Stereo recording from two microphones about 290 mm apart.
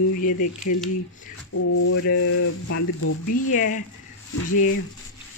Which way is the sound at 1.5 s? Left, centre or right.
Left.